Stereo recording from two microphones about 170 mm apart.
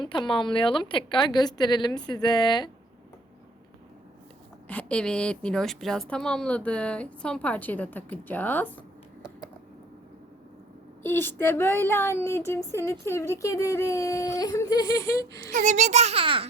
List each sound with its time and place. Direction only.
0.0 s a woman's voice: 30° left (ahead or behind)
4.7 s speech: 5° left (ahead or behind)
11.0 s speech: 10° left (ahead or behind)
15.5 s a child's voice: 45° right (ahead or behind)